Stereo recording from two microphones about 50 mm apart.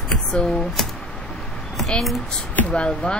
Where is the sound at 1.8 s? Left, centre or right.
Centre.